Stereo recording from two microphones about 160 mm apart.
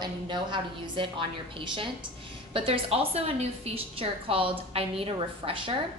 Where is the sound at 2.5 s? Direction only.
35° right (ahead or behind).